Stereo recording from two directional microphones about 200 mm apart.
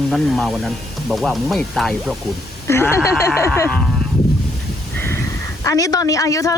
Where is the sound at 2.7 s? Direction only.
15° left (ahead or behind).